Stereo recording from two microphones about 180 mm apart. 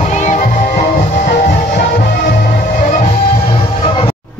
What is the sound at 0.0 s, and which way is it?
Music, 40° left (ahead or behind).